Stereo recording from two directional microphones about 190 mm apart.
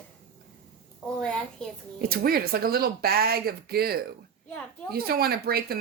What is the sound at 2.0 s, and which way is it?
Speech, 55° right (ahead or behind).